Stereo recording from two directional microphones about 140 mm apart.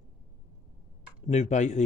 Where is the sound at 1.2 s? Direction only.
55° left (ahead or behind).